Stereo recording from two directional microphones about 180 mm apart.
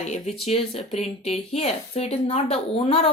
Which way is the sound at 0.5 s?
35° left (ahead or behind).